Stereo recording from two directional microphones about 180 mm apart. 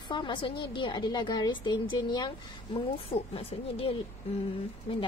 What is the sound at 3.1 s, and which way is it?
Speech, 35° left (ahead or behind).